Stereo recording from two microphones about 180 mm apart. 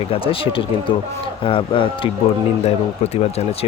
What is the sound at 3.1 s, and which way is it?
Speech, 35° left (ahead or behind).